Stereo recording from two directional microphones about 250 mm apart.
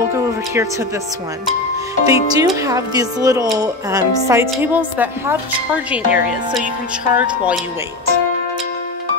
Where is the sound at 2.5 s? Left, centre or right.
Centre.